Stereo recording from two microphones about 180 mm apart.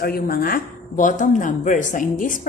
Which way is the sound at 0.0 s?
55° left (ahead or behind).